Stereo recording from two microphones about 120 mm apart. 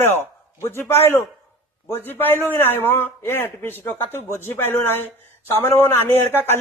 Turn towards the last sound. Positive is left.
turn(degrees=20)  # may be behind; listen again after turning